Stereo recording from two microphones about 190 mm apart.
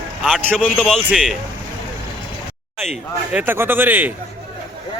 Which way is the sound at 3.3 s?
10° right (ahead or behind).